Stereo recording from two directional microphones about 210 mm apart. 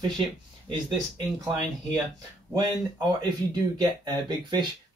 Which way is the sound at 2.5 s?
20° right (ahead or behind).